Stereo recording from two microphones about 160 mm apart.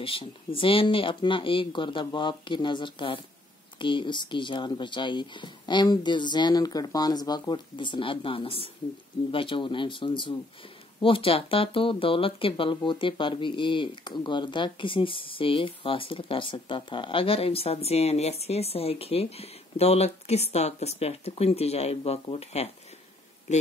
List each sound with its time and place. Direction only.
0.0 s speech: 35° left (ahead or behind)